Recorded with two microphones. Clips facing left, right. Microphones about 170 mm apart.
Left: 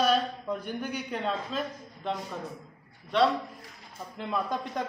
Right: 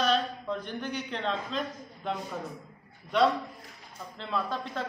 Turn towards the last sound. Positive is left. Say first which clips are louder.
# left 1 dB
turn(degrees=15)  # may be behind; listen again after turning